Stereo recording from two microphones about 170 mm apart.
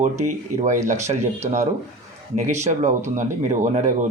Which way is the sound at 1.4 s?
40° right (ahead or behind).